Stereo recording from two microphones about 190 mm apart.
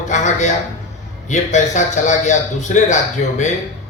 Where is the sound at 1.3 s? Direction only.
40° left (ahead or behind).